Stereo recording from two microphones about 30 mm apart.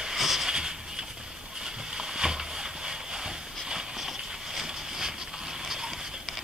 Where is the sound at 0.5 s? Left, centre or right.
Right.